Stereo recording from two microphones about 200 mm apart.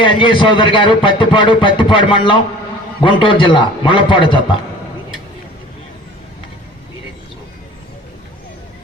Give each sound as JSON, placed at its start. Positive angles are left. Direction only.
{"t": 0.0, "sound": "a man's voice", "side_deg": 25}